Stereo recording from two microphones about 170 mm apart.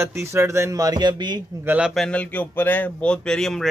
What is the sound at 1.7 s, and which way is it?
Speech, 5° right (ahead or behind).